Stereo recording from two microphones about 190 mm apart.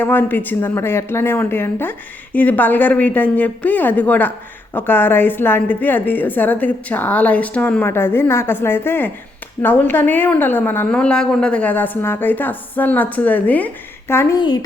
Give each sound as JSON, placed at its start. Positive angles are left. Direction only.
{"t": 0.0, "sound": "a woman's voice", "side_deg": 10}